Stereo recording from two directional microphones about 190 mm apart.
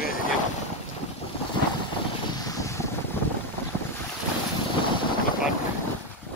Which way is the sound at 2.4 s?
15° left (ahead or behind).